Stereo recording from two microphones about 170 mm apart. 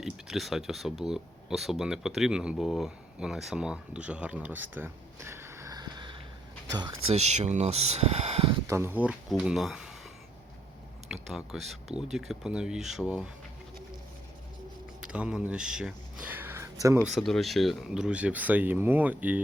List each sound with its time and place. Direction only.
0.0 s speech: centre (ahead or behind); by 6.9 s 25° right (ahead or behind)
7.1 s speech: 40° right (ahead or behind)
8.6 s speech: 15° right (ahead or behind)
11.1 s speech: centre (ahead or behind)
15.0 s a sound: 5° right (ahead or behind)
17.1 s speech: centre (ahead or behind)